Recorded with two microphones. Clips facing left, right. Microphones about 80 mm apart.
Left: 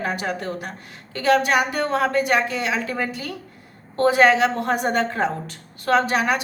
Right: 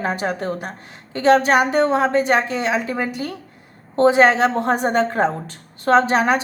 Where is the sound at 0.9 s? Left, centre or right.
Right.